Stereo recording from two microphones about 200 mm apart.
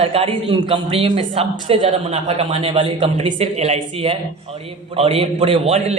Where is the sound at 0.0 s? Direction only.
30° right (ahead or behind).